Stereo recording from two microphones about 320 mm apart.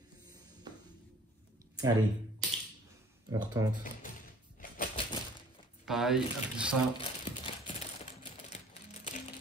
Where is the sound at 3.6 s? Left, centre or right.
Centre.